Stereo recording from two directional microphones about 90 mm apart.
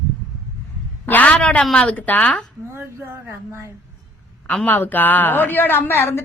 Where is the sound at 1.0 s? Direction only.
20° left (ahead or behind).